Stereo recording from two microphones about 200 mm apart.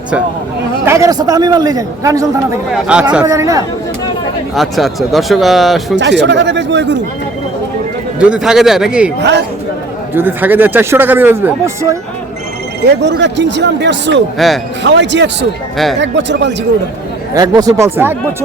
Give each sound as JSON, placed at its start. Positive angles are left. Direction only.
{"t": 0.9, "sound": "speech", "side_deg": -15}
{"t": 2.7, "sound": "speech", "side_deg": -5}
{"t": 4.5, "sound": "speech", "side_deg": 0}
{"t": 6.0, "sound": "speech", "side_deg": -60}
{"t": 8.2, "sound": "speech", "side_deg": -5}
{"t": 10.2, "sound": "speech", "side_deg": -10}
{"t": 12.8, "sound": "speech", "side_deg": -60}
{"t": 14.3, "sound": "speech", "side_deg": 0}
{"t": 14.8, "sound": "speech", "side_deg": -60}
{"t": 17.3, "sound": "speech", "side_deg": -20}